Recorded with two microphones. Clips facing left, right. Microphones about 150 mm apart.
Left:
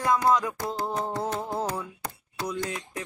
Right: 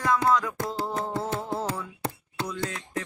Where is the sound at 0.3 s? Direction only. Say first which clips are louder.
Left 1 dB; 15° left (ahead or behind).